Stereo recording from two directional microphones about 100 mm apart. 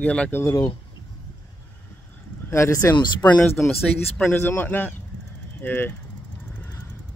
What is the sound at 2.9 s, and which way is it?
Speech, 45° left (ahead or behind).